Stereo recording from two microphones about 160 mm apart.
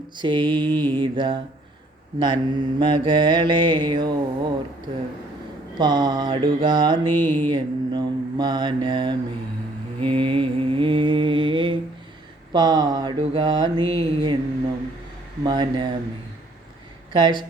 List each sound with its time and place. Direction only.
0.2 s mantra: 30° right (ahead or behind)
5.7 s mantra: 30° right (ahead or behind)
7.2 s speech: 15° left (ahead or behind)
7.5 s mantra: 25° right (ahead or behind)
15.4 s mantra: 30° right (ahead or behind)
17.1 s mantra: 30° right (ahead or behind)